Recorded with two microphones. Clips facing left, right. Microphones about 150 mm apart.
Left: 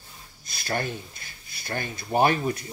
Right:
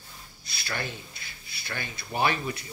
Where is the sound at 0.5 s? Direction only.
45° left (ahead or behind).